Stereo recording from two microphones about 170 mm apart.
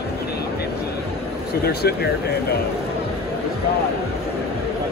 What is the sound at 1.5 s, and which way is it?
Speech, 70° left (ahead or behind).